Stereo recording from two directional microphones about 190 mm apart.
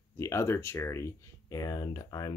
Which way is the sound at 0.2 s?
15° left (ahead or behind).